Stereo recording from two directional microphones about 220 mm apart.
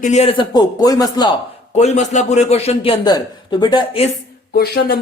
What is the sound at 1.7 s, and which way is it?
A man's voice, 30° left (ahead or behind).